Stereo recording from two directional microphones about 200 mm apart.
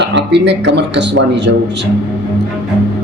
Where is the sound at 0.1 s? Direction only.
60° right (ahead or behind).